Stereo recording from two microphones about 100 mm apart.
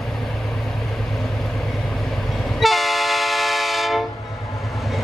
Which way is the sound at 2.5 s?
Centre (ahead or behind).